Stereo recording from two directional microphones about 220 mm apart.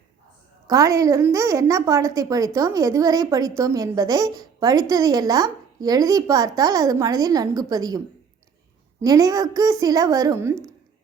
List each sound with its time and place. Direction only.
0.7 s a woman's voice: 15° right (ahead or behind)